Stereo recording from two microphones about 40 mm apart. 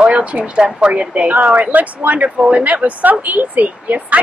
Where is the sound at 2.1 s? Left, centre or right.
Right.